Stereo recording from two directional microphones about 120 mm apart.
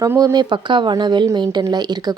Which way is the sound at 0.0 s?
25° right (ahead or behind).